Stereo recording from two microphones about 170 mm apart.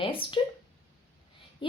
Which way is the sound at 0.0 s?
30° left (ahead or behind).